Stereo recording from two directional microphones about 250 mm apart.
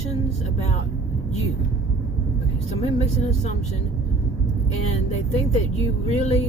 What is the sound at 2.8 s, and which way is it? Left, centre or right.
Speech, left.